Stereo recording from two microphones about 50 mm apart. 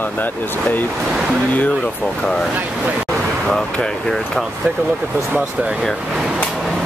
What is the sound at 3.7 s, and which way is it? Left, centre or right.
Speech, centre.